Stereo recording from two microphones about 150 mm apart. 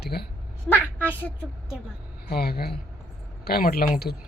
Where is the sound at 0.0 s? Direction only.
90° left.